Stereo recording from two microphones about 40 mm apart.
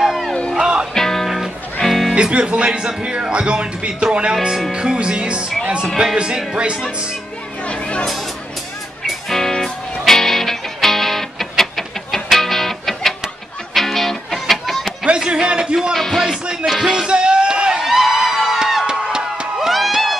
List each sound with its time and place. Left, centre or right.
0.6 s music: centre
0.9 s music: centre
1.2 s music: centre
2.1 s speech: right
7.6 s a sound: left
9.3 s music: centre
15.0 s a sound: right
15.9 s music: centre
16.6 s music: centre
16.9 s a sound: right
17.9 s music: centre
19.1 s music: centre